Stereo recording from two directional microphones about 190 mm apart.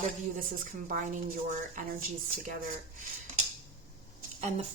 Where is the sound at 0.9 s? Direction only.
45° right (ahead or behind).